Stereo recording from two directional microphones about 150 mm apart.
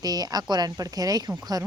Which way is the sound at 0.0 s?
25° right (ahead or behind).